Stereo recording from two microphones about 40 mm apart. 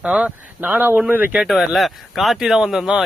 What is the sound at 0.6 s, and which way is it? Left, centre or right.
Speech, right.